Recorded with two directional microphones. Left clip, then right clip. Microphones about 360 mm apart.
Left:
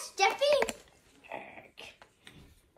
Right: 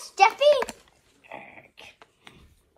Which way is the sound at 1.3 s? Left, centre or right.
Centre.